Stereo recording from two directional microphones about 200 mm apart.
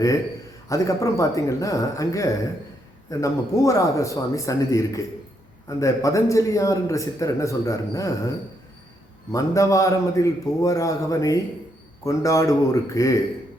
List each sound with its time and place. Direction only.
0.7 s a man's voice: 15° left (ahead or behind)
9.3 s a man's voice: 15° left (ahead or behind)